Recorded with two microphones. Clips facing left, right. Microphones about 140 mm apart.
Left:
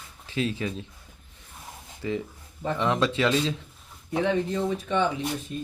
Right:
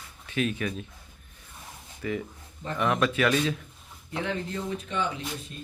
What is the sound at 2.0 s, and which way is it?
Speech, 20° left (ahead or behind).